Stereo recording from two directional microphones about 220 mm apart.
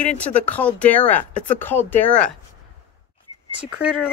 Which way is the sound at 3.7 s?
5° right (ahead or behind).